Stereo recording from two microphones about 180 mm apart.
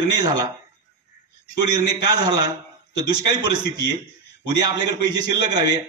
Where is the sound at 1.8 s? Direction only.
20° right (ahead or behind).